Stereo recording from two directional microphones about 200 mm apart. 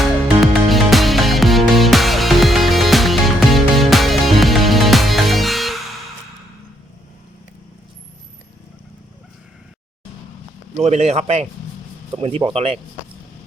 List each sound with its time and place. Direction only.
0.7 s music: centre (ahead or behind)
10.8 s a man's voice: 35° right (ahead or behind)